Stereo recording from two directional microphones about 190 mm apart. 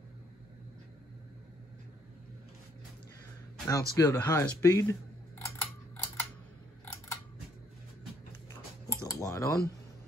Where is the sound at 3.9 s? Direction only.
15° left (ahead or behind).